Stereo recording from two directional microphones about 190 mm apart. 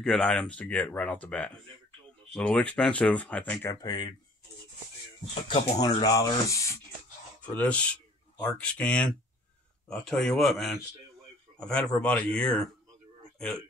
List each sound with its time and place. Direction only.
0.0 s speech: 5° left (ahead or behind)
3.8 s speech: 20° left (ahead or behind)
5.3 s speech: 30° left (ahead or behind); by 12.6 s 5° left (ahead or behind)